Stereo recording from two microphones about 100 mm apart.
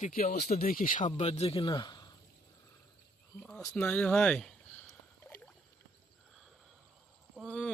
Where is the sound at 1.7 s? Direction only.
45° left (ahead or behind).